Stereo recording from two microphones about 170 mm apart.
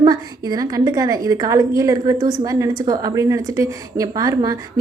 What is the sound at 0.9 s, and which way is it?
A woman's voice, 20° right (ahead or behind).